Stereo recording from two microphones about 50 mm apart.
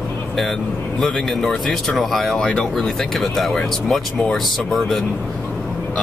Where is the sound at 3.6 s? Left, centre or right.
Centre.